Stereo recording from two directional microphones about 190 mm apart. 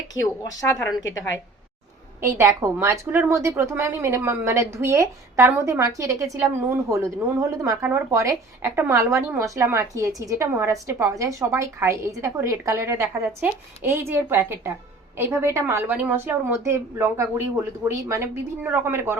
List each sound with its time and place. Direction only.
0.1 s a woman's voice: 10° right (ahead or behind)
0.8 s a woman's voice: 15° left (ahead or behind)
2.2 s a woman's voice: 15° right (ahead or behind)